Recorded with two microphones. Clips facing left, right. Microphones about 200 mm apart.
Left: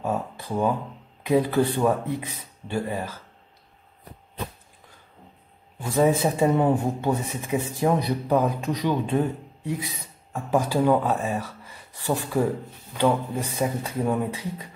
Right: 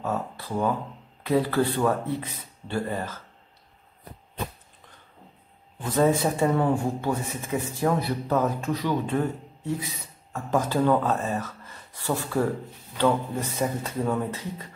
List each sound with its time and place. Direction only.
0.0 s a man's voice: 15° left (ahead or behind)
5.8 s a man's voice: 10° left (ahead or behind)
10.3 s a man's voice: 10° left (ahead or behind)